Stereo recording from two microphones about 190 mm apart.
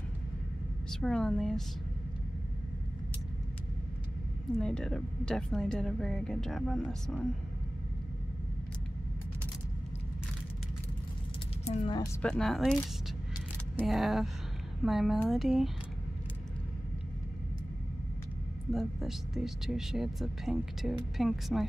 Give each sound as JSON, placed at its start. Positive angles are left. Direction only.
{"t": 0.8, "sound": "speech", "side_deg": 5}
{"t": 4.6, "sound": "speech", "side_deg": 5}
{"t": 11.6, "sound": "a sound", "side_deg": 35}
{"t": 12.2, "sound": "speech", "side_deg": 5}
{"t": 13.7, "sound": "speech", "side_deg": 0}
{"t": 18.7, "sound": "speech", "side_deg": 0}